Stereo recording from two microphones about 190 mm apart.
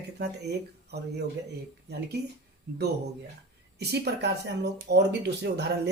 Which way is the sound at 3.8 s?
60° right (ahead or behind).